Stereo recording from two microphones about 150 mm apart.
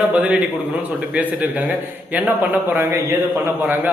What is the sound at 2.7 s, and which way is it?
Speech, 15° right (ahead or behind).